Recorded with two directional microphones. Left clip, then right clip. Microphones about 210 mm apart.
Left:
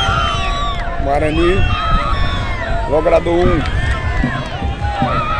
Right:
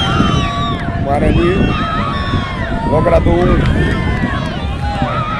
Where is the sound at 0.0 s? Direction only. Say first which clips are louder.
Right 1 dB; 15° right (ahead or behind).